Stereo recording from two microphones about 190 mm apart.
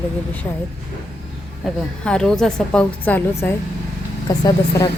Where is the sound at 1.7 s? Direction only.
5° left (ahead or behind).